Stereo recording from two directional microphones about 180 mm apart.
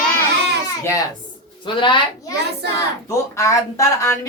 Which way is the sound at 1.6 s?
25° left (ahead or behind).